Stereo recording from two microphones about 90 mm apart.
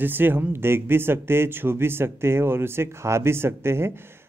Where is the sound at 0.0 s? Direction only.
20° right (ahead or behind).